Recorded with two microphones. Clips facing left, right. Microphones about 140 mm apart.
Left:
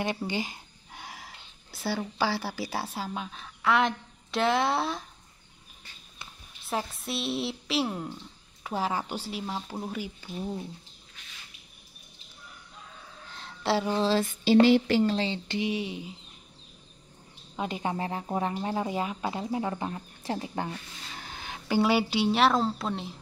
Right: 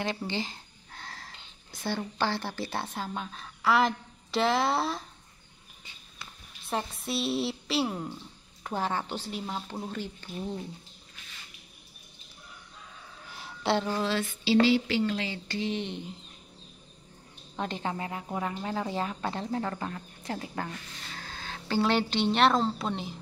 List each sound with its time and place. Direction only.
0.0 s speech: 15° left (ahead or behind)
6.7 s speech: centre (ahead or behind)
13.3 s a sound: 5° right (ahead or behind)
14.0 s a sound: 40° left (ahead or behind)
15.1 s speech: 25° left (ahead or behind)
15.7 s speech: 5° left (ahead or behind)
17.6 s speech: 10° left (ahead or behind)
17.9 s speech: 30° left (ahead or behind); by 23.1 s centre (ahead or behind)